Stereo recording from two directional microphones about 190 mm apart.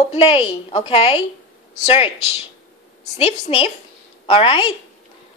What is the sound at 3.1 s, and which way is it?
A woman's voice, 30° left (ahead or behind).